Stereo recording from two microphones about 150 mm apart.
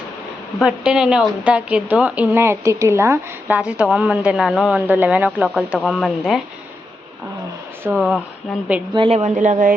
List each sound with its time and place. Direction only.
0.6 s a woman's voice: 5° right (ahead or behind)
7.9 s speech: 5° right (ahead or behind)
8.9 s speech: 35° right (ahead or behind); by 9.7 s 60° right (ahead or behind)